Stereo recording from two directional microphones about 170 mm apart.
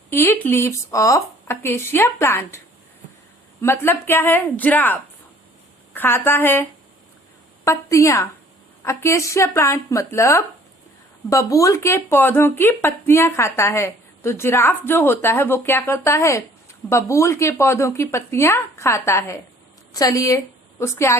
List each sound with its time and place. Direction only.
0.1 s speech: 15° left (ahead or behind)
3.6 s a woman's voice: 15° left (ahead or behind)